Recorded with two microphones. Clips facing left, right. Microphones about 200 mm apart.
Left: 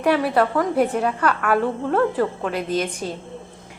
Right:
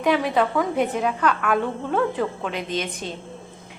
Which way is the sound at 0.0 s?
5° left (ahead or behind).